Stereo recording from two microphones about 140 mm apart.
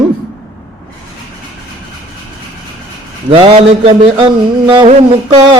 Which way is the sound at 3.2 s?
40° right (ahead or behind).